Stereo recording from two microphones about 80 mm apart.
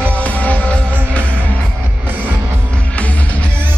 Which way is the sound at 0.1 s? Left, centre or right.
Centre.